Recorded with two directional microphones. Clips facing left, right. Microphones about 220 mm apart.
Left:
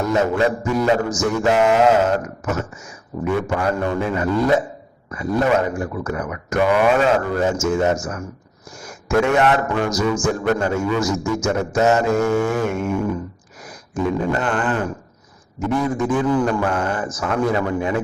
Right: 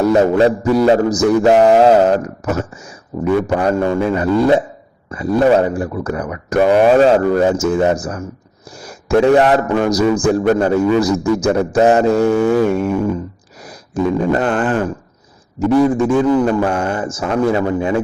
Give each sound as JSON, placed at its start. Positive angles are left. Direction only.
{"t": 0.1, "sound": "a man's voice", "side_deg": -35}